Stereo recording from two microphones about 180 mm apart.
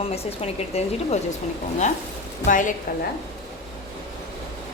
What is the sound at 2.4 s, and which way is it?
Speech, 45° left (ahead or behind).